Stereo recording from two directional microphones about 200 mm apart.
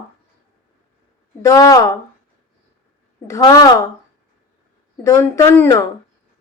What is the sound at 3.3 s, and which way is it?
Speech, 20° left (ahead or behind).